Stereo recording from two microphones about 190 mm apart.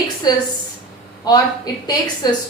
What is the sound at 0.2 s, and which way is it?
A woman's voice, 20° left (ahead or behind).